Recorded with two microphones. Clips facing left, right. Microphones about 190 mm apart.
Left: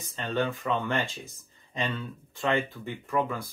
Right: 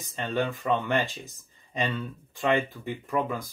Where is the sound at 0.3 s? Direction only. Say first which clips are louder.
Right 1 dB; 15° right (ahead or behind).